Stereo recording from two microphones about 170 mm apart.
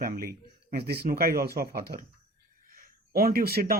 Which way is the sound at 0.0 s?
60° right (ahead or behind).